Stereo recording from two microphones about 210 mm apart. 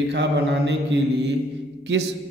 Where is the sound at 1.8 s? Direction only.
60° right (ahead or behind).